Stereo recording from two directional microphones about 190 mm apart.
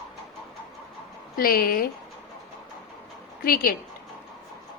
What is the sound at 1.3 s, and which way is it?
Speech, 50° left (ahead or behind).